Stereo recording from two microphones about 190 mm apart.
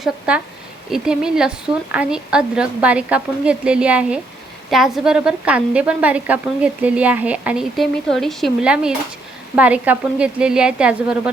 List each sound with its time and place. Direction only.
0.0 s a woman's voice: 5° right (ahead or behind)